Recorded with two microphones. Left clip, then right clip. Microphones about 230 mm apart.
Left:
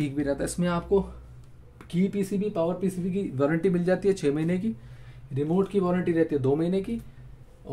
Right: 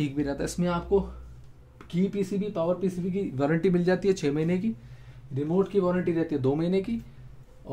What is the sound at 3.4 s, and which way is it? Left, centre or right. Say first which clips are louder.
Speech: left 1 dB; centre.